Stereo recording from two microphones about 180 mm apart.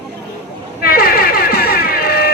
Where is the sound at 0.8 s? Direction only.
55° left (ahead or behind).